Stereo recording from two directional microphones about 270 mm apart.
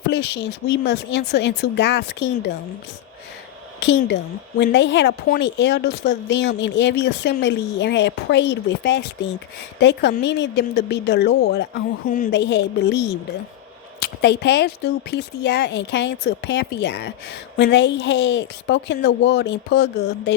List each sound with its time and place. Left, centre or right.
0.1 s a woman's voice: left
3.8 s a woman's voice: left